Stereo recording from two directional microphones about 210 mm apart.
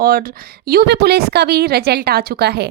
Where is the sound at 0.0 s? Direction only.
45° right (ahead or behind).